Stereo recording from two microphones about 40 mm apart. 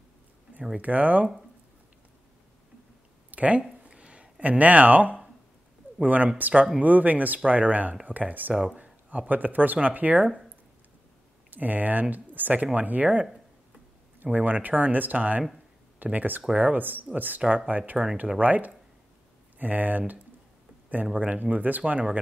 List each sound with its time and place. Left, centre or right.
0.7 s speech: right
3.3 s a sound: right
6.0 s speech: right
8.6 s speech: right
11.5 s speech: right
14.2 s speech: right